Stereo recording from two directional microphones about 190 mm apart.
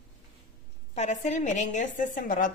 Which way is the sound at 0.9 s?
35° left (ahead or behind).